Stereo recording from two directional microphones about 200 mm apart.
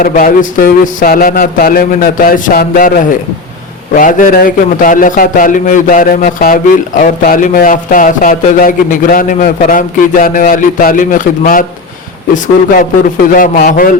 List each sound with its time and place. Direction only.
0.0 s a man's voice: 45° left (ahead or behind)
3.9 s a man's voice: 45° left (ahead or behind)
13.3 s a man's voice: 40° left (ahead or behind)